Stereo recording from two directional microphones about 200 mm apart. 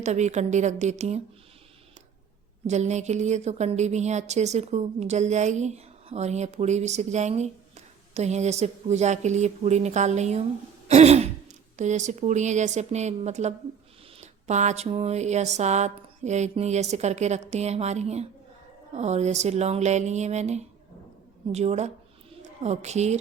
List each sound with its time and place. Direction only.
0.0 s speech: 35° right (ahead or behind)
2.6 s speech: 35° right (ahead or behind)
10.8 s throat clearing: 35° right (ahead or behind)
11.8 s speech: 35° right (ahead or behind)